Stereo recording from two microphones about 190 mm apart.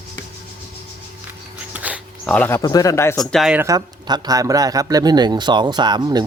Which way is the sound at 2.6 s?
20° left (ahead or behind).